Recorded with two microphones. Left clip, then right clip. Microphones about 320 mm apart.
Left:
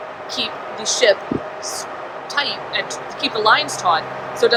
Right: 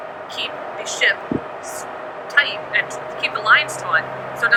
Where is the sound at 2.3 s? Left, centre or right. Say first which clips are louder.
Right 4 dB; centre.